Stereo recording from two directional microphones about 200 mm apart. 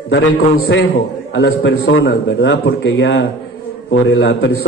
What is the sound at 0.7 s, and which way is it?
A man's voice, 75° left (ahead or behind).